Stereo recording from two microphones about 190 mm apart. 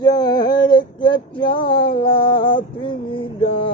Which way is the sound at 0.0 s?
20° left (ahead or behind).